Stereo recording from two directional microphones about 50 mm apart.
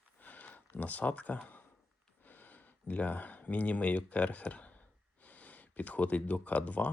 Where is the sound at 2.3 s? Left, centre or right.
Left.